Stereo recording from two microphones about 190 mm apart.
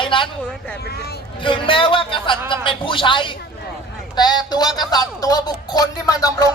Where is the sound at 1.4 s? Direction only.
25° left (ahead or behind).